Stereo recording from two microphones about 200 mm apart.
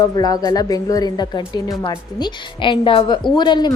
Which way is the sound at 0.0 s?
20° left (ahead or behind).